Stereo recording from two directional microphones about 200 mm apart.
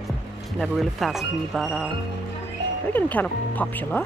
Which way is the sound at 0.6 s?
Centre (ahead or behind).